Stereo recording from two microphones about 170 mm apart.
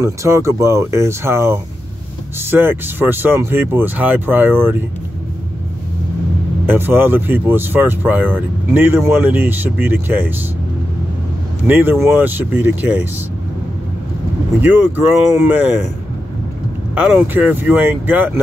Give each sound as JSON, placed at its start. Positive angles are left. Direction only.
{"t": 0.0, "sound": "speech", "side_deg": -15}
{"t": 6.6, "sound": "speech", "side_deg": -15}
{"t": 11.6, "sound": "speech", "side_deg": -10}
{"t": 14.7, "sound": "speech", "side_deg": -10}
{"t": 16.9, "sound": "speech", "side_deg": -10}